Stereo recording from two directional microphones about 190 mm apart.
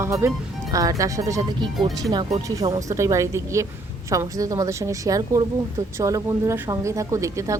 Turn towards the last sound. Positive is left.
turn(degrees=-15)  # may be behind; listen again after turning